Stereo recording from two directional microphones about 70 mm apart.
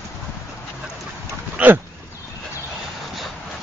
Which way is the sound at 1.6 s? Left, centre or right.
Right.